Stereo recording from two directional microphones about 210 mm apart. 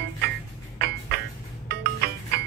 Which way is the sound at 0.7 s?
50° right (ahead or behind).